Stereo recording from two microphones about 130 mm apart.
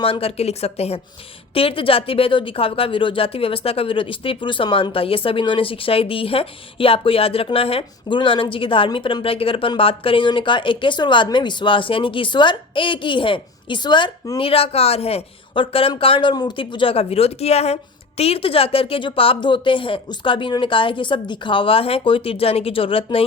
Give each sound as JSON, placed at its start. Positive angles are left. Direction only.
{"t": 0.0, "sound": "speech", "side_deg": 45}